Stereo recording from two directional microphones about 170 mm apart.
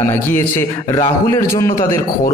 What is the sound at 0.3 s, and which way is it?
A man's voice, 15° left (ahead or behind).